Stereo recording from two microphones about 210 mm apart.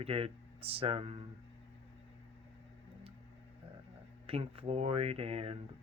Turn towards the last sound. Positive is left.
turn(degrees=-30)  # may be behind; listen again after turning